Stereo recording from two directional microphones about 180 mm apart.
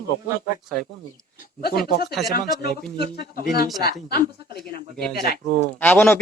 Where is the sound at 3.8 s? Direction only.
60° left (ahead or behind).